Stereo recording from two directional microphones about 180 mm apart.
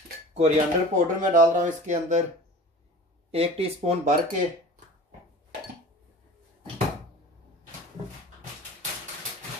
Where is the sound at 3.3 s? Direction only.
35° right (ahead or behind).